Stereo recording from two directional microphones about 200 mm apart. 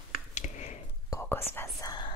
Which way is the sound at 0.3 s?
35° left (ahead or behind).